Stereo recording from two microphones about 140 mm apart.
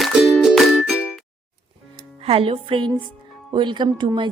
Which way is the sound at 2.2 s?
45° right (ahead or behind).